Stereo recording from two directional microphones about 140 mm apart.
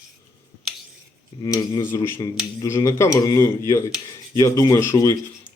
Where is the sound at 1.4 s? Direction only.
30° left (ahead or behind).